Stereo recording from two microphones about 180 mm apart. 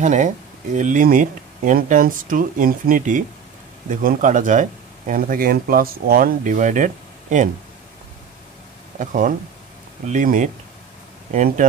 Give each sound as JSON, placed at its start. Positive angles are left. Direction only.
{"t": 0.0, "sound": "speech", "side_deg": -45}
{"t": 8.9, "sound": "speech", "side_deg": -45}